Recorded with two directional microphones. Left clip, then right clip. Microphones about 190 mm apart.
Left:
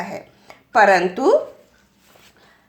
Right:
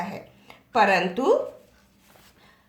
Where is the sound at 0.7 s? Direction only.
35° left (ahead or behind).